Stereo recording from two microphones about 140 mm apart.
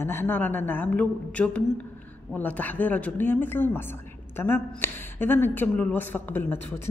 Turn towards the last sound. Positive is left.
turn(degrees=15)  # may be behind; listen again after turning